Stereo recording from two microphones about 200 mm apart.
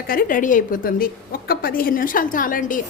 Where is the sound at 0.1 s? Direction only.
45° left (ahead or behind).